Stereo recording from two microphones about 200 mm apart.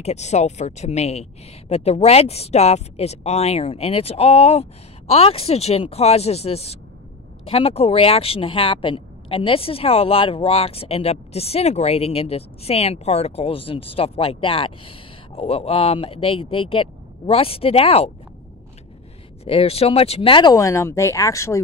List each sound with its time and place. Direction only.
0.0 s speech: 35° left (ahead or behind)
19.4 s speech: 30° left (ahead or behind)
20.5 s speech: 15° left (ahead or behind)